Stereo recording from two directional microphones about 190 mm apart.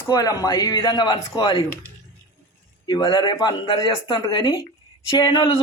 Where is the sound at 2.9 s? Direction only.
25° left (ahead or behind).